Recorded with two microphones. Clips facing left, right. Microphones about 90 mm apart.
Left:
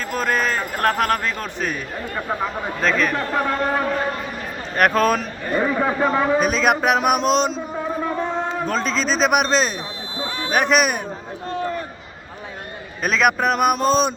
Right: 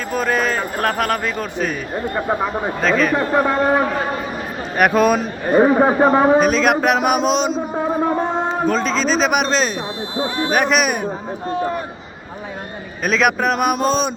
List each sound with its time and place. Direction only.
0.1 s a man's voice: 5° right (ahead or behind)
2.1 s a man's voice: 20° right (ahead or behind)
2.8 s a man's voice: centre (ahead or behind)
3.6 s a man's voice: 20° right (ahead or behind)
5.6 s a man's voice: 35° right (ahead or behind)
6.4 s a man's voice: centre (ahead or behind)
7.8 s music: 40° right (ahead or behind)
8.6 s a man's voice: centre (ahead or behind)
11.4 s a man's voice: 15° right (ahead or behind)
13.0 s a man's voice: centre (ahead or behind)